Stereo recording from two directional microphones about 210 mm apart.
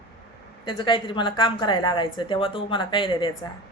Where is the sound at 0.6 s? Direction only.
20° left (ahead or behind).